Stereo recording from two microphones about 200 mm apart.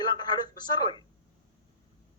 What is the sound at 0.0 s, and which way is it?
A woman's voice, 20° left (ahead or behind).